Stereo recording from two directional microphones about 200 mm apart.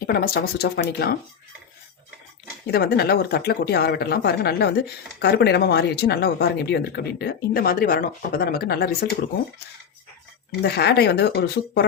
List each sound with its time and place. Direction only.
0.0 s speech: 50° left (ahead or behind)
2.6 s speech: 55° left (ahead or behind)
10.6 s speech: 55° left (ahead or behind)